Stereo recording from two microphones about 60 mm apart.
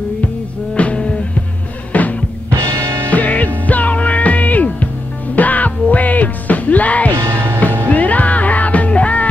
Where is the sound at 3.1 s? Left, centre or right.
Left.